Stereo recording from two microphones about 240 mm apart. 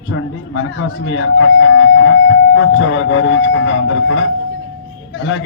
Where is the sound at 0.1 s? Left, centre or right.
Left.